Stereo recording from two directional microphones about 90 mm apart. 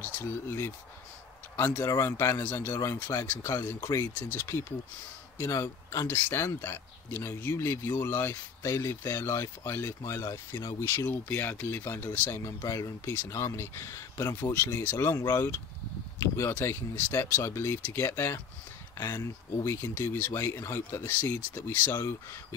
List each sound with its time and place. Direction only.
0.0 s speech: 25° left (ahead or behind)
1.9 s a man's voice: 30° left (ahead or behind)
11.1 s speech: 20° left (ahead or behind)